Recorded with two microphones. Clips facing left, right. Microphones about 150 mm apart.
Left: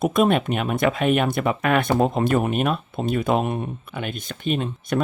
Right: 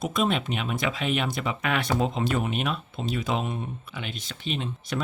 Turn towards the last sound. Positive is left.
turn(degrees=50)  # may be behind; listen again after turning